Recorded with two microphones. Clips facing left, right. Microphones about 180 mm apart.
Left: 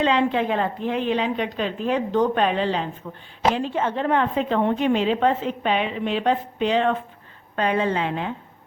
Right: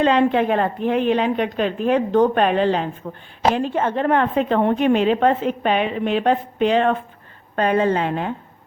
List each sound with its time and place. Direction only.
0.0 s a woman's voice: 55° right (ahead or behind)